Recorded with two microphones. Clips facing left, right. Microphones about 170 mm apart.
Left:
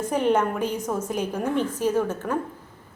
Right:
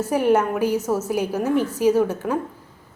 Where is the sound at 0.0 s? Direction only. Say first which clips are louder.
Right 3 dB; 10° right (ahead or behind).